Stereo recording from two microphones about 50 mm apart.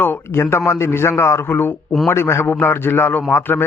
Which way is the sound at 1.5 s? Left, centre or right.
Left.